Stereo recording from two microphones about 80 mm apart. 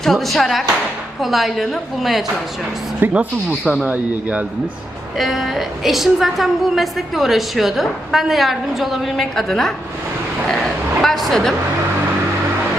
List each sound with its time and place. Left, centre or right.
0.0 s a woman's voice: centre
3.0 s speech: right
3.6 s a woman's voice: centre
3.8 s a man's voice: centre
5.1 s a woman's voice: centre
10.5 s a sound: centre